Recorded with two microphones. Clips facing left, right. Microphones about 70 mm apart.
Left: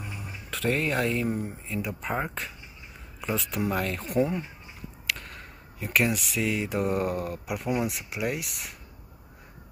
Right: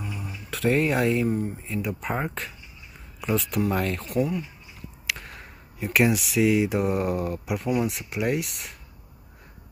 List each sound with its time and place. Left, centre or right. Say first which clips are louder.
0.5 s speech: right 4 dB; centre
4.2 s speech: even; left
5.0 s speech: right 1 dB; centre